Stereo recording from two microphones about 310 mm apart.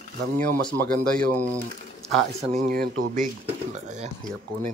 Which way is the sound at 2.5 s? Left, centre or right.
Right.